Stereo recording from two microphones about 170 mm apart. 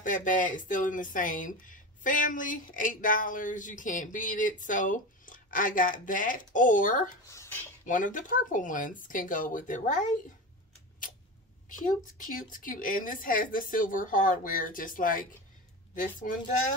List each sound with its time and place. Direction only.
0.0 s speech: 50° left (ahead or behind)
7.2 s speech: 15° left (ahead or behind)
7.8 s speech: 50° left (ahead or behind)
11.8 s speech: 50° left (ahead or behind)